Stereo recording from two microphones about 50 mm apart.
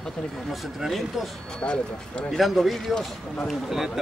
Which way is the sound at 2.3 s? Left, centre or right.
Centre.